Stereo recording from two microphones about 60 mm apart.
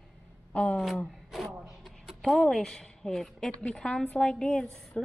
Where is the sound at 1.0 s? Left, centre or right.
Centre.